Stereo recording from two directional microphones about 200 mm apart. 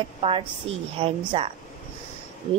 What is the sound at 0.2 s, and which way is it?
A woman's voice, 25° right (ahead or behind).